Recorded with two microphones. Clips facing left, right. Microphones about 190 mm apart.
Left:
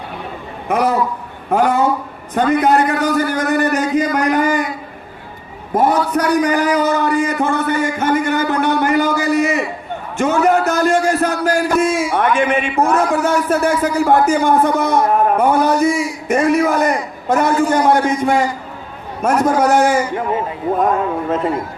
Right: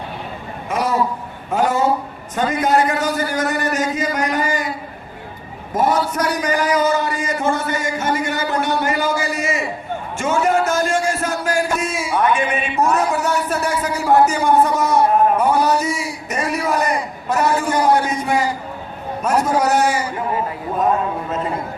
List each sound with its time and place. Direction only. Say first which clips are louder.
0.7 s a man's voice: left 3 dB; 60° left (ahead or behind)
5.7 s a man's voice: left 3 dB; 60° left (ahead or behind)